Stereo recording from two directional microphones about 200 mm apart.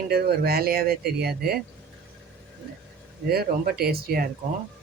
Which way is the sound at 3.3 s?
50° right (ahead or behind).